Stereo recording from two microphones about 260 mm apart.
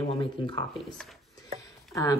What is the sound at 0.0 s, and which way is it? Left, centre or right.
Speech, left.